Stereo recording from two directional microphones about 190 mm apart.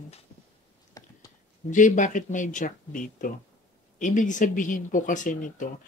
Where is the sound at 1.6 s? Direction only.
40° left (ahead or behind).